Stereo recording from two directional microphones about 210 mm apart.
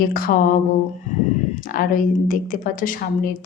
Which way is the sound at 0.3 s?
40° left (ahead or behind).